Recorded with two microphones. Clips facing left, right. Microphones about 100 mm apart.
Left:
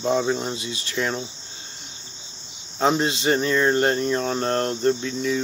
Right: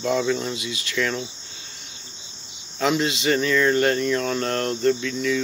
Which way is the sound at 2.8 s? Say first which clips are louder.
Left 1 dB; 30° left (ahead or behind).